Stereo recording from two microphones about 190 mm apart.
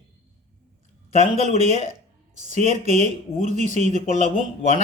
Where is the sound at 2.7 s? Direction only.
35° right (ahead or behind).